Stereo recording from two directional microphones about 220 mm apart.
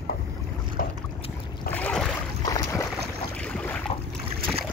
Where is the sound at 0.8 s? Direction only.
45° left (ahead or behind).